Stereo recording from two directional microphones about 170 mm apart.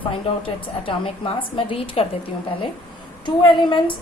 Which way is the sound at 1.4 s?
30° left (ahead or behind).